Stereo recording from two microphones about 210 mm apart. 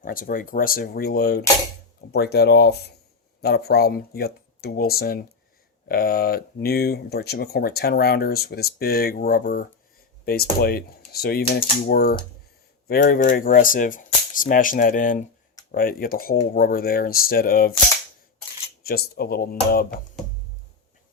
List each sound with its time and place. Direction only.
0.0 s speech: 40° left (ahead or behind)
18.8 s speech: 45° left (ahead or behind)